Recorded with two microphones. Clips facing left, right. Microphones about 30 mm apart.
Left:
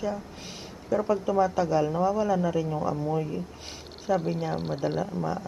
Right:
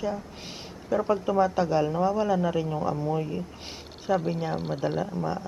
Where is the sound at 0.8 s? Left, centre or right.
Centre.